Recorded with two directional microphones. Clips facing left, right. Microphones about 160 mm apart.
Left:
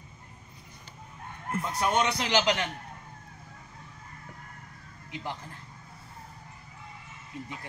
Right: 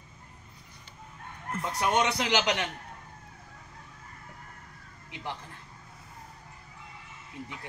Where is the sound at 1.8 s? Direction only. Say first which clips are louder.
Right 1 dB; 15° right (ahead or behind).